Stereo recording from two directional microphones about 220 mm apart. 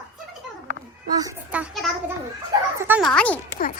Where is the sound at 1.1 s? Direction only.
15° right (ahead or behind).